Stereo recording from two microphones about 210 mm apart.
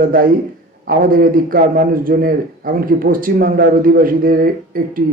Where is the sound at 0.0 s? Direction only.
40° right (ahead or behind).